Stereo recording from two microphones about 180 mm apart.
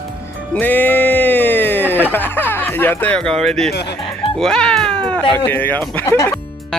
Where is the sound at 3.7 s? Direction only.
65° left (ahead or behind).